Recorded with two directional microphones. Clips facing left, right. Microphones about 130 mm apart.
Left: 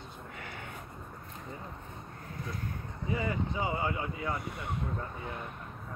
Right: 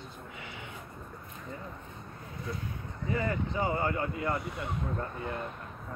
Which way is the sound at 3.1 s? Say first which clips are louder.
Right 1 dB; 10° left (ahead or behind).